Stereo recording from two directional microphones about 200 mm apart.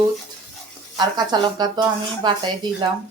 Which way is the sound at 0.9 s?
20° right (ahead or behind).